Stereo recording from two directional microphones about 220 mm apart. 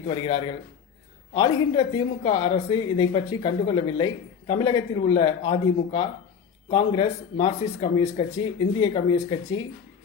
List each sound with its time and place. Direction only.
0.1 s speech: 20° left (ahead or behind)